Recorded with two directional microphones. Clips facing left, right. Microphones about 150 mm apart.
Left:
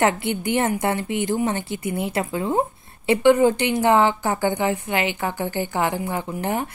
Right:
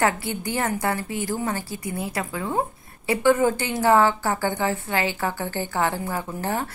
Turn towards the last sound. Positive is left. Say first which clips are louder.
# left 2 dB
turn(degrees=15)  # may be behind; listen again after turning